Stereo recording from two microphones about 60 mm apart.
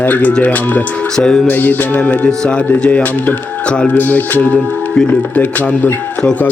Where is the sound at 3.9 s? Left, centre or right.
Left.